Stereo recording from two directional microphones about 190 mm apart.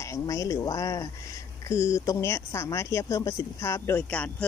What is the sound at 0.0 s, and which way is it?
Speech, 15° left (ahead or behind).